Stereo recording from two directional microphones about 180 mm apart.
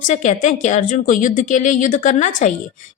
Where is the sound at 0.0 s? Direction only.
45° left (ahead or behind).